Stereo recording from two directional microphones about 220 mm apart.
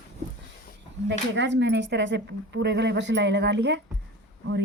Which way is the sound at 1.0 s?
55° right (ahead or behind).